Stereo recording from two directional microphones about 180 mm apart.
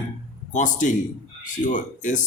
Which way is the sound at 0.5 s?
45° left (ahead or behind).